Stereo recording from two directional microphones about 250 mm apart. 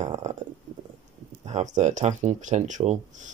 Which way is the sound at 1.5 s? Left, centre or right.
Right.